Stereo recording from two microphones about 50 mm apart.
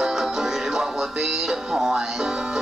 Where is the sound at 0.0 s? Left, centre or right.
Centre.